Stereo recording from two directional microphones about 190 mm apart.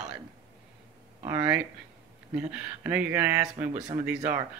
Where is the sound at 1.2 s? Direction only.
10° right (ahead or behind).